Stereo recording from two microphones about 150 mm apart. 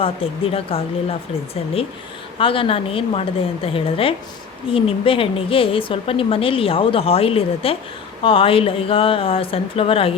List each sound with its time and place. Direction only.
0.0 s speech: 40° left (ahead or behind)
2.4 s speech: 35° left (ahead or behind)